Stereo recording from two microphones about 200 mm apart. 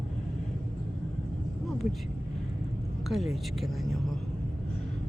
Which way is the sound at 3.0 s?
Centre (ahead or behind).